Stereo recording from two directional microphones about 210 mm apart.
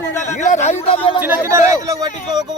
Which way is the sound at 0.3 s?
35° left (ahead or behind).